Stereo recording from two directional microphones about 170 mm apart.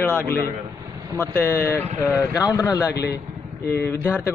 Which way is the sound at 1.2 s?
15° left (ahead or behind).